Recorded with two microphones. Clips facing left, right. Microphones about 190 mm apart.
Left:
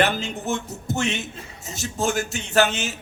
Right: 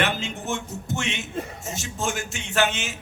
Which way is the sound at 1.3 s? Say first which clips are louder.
Right 10 dB; 50° right (ahead or behind).